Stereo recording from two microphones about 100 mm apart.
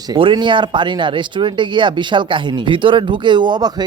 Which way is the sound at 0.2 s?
55° right (ahead or behind).